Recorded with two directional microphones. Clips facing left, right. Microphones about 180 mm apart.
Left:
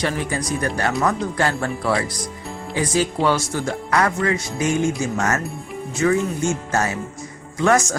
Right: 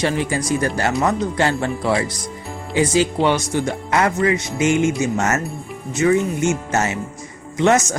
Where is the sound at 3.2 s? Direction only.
20° right (ahead or behind).